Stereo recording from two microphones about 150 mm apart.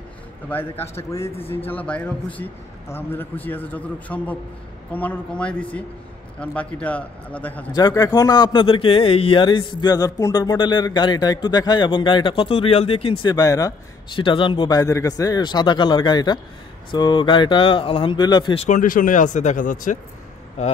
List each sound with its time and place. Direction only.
0.5 s a man's voice: 15° left (ahead or behind)
7.7 s speech: 25° left (ahead or behind)
18.6 s speech: 60° left (ahead or behind)